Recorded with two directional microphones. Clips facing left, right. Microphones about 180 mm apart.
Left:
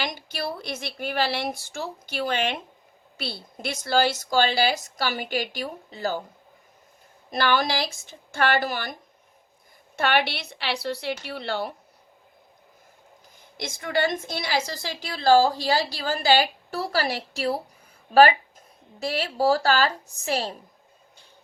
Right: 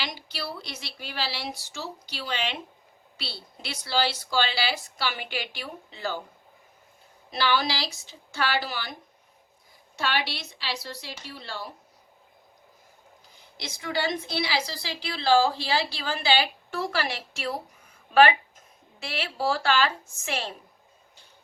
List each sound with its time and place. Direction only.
0.0 s a woman's voice: 50° left (ahead or behind)
7.3 s a woman's voice: 50° left (ahead or behind); by 11.7 s 65° left (ahead or behind)
13.3 s a woman's voice: 50° left (ahead or behind)